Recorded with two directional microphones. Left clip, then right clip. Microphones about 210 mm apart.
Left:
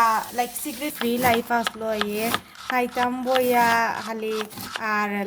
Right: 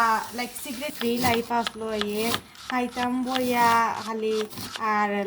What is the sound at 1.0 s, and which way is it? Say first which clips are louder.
Speech: left 1 dB; centre (ahead or behind).